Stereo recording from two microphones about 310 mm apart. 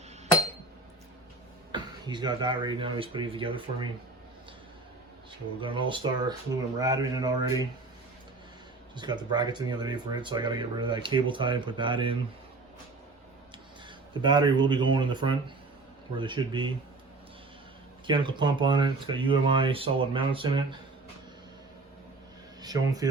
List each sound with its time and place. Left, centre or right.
1.7 s speech: centre
5.5 s speech: centre
9.0 s speech: centre
14.1 s speech: centre
18.0 s speech: centre
22.6 s speech: centre